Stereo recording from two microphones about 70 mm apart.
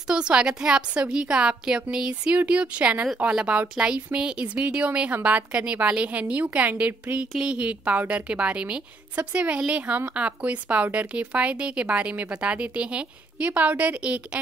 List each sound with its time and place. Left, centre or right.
0.1 s a woman's voice: centre